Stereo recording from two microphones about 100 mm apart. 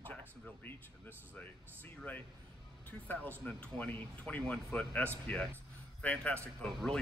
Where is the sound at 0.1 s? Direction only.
15° left (ahead or behind).